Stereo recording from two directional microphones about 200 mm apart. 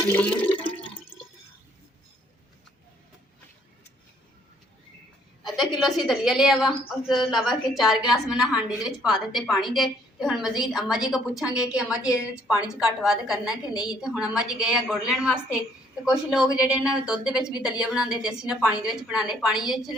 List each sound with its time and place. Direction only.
0.0 s toilet flush: 10° left (ahead or behind)
0.6 s water: 25° left (ahead or behind)
5.4 s a woman's voice: centre (ahead or behind)